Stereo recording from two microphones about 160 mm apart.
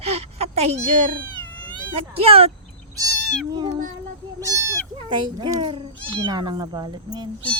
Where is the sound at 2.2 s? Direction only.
40° right (ahead or behind).